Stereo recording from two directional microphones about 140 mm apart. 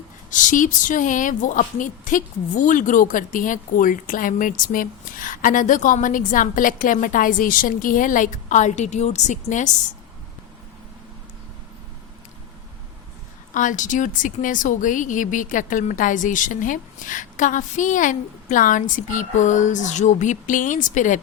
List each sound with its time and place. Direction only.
0.3 s speech: 65° left (ahead or behind)
13.5 s speech: 65° left (ahead or behind)